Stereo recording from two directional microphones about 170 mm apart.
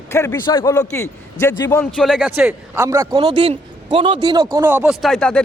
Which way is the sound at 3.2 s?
35° right (ahead or behind).